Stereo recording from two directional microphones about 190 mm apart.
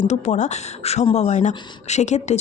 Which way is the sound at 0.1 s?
40° left (ahead or behind).